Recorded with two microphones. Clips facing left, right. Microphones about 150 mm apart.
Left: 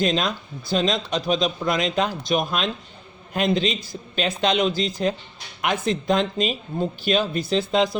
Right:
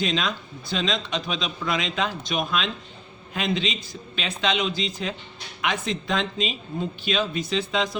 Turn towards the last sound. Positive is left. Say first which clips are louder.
# left 5 dB
turn(degrees=35)  # may be behind; listen again after turning